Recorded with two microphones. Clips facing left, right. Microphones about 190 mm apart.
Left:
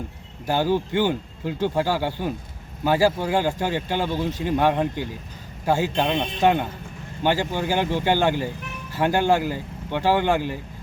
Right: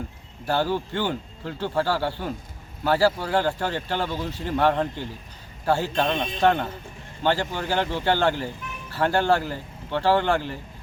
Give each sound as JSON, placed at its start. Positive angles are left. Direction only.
{"t": 0.4, "sound": "speech", "side_deg": 15}